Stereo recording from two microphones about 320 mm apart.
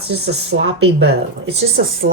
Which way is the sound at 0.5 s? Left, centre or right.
Right.